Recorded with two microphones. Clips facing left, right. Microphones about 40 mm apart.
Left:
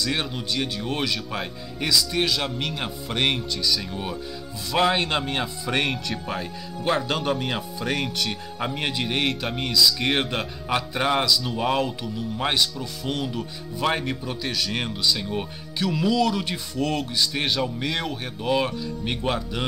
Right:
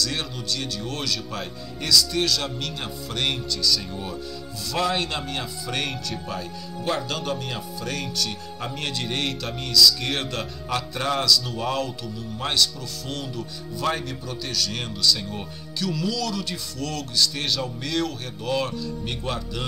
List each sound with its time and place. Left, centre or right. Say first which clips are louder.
0.0 s speech: left 2 dB; left